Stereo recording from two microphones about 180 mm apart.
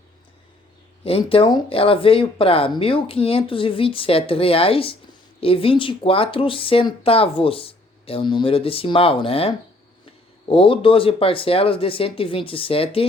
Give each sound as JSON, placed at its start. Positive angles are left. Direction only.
{"t": 1.0, "sound": "speech", "side_deg": 30}